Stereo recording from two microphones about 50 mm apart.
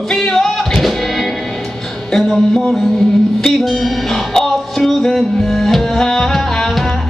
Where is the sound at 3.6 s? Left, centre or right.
Centre.